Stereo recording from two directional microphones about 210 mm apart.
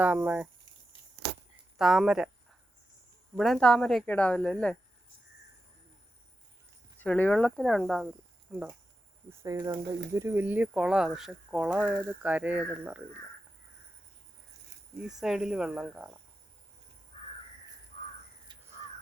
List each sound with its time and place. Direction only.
0.0 s speech: 5° right (ahead or behind)
1.8 s speech: centre (ahead or behind)
3.3 s speech: centre (ahead or behind)
7.0 s speech: 5° left (ahead or behind)
9.4 s speech: 15° right (ahead or behind)
14.9 s speech: 5° right (ahead or behind)
17.1 s crow: 25° left (ahead or behind)
18.5 s crow: 20° right (ahead or behind)